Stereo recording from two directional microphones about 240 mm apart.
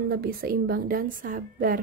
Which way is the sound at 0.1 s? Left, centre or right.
Right.